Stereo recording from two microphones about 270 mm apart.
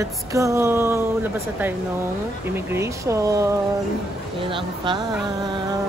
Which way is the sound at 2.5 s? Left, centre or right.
Centre.